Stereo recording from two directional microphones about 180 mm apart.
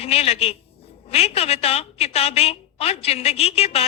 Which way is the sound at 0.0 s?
35° left (ahead or behind).